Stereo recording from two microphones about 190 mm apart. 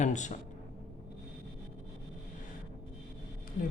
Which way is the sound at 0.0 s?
40° left (ahead or behind).